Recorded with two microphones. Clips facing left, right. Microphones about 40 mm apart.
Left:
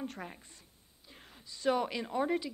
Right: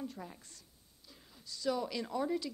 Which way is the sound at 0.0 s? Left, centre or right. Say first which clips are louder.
Left 2 dB; left.